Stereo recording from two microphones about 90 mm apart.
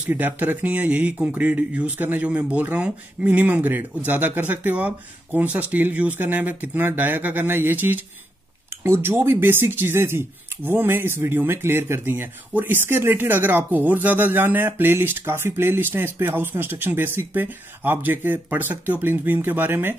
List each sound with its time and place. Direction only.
0.1 s speech: 20° right (ahead or behind)